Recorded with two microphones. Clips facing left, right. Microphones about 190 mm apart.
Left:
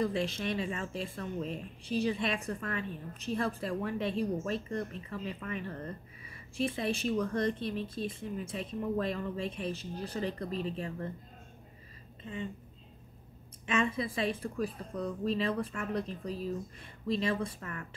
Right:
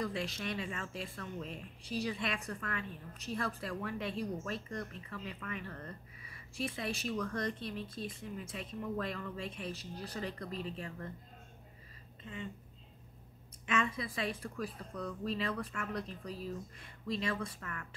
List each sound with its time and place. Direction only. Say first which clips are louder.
0.0 s speech: left 6 dB; 25° left (ahead or behind)
13.7 s speech: left 4 dB; 25° left (ahead or behind)